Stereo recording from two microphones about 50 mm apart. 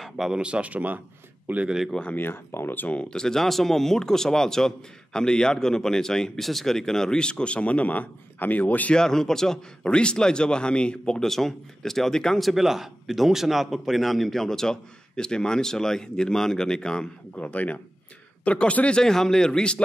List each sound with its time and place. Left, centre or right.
0.0 s a sound: centre
0.4 s speech: right
2.1 s speech: left
3.0 s speech: centre; by 8.9 s left
8.9 s speech: centre
11.2 s speech: centre
12.4 s speech: centre
17.4 s speech: left